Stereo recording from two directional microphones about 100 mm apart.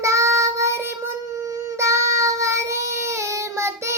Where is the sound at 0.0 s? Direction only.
30° right (ahead or behind).